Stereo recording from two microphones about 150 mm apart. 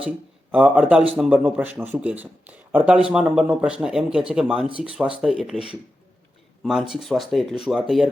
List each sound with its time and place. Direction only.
0.5 s a man's voice: 10° right (ahead or behind)
6.6 s speech: 5° right (ahead or behind)